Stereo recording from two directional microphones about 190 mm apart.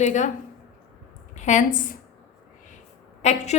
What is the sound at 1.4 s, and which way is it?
Speech, 40° left (ahead or behind).